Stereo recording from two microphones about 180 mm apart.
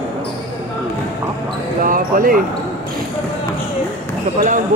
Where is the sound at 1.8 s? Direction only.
50° right (ahead or behind).